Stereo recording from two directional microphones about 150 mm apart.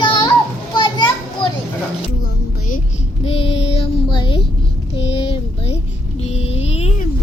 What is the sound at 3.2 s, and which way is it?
Child singing, 40° left (ahead or behind).